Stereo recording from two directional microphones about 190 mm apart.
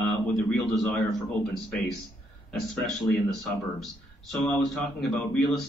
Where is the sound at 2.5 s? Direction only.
Centre (ahead or behind).